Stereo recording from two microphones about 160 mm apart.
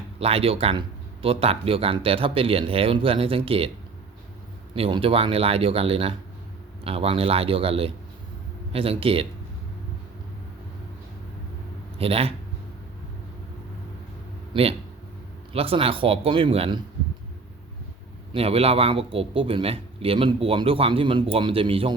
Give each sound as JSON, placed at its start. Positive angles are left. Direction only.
{"t": 0.2, "sound": "a man's voice", "side_deg": -40}
{"t": 4.7, "sound": "a man's voice", "side_deg": -35}
{"t": 11.9, "sound": "a man's voice", "side_deg": -40}
{"t": 14.5, "sound": "a man's voice", "side_deg": -40}
{"t": 18.3, "sound": "a man's voice", "side_deg": -40}